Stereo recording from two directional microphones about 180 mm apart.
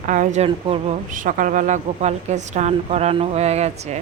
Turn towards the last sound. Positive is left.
turn(degrees=-35)  # may be behind; listen again after turning